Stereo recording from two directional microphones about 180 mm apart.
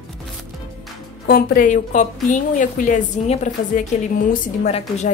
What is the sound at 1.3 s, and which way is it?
A woman's voice, 55° left (ahead or behind).